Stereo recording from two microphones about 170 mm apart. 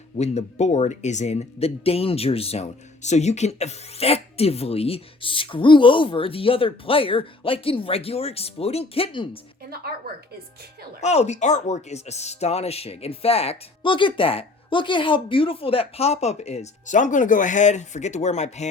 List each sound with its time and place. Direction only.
0.2 s speech: 40° left (ahead or behind)
11.0 s speech: 40° left (ahead or behind)